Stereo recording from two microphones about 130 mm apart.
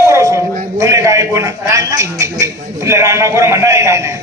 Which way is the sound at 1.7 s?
25° right (ahead or behind).